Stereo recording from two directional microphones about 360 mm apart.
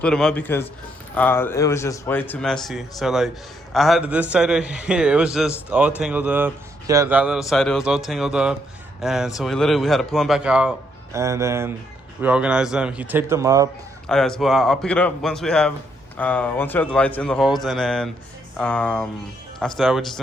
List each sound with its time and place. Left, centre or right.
0.0 s a man's voice: centre